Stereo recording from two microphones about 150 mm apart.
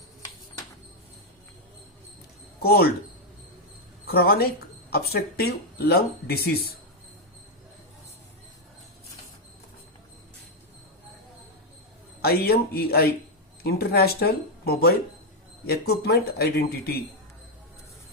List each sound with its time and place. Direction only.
2.6 s speech: 90° left
4.0 s speech: 90° left
12.2 s speech: 90° left